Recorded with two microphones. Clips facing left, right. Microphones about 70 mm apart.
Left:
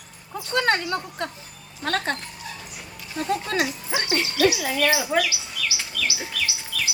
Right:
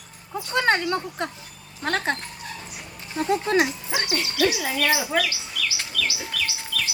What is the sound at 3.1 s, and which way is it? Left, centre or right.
Speech, right.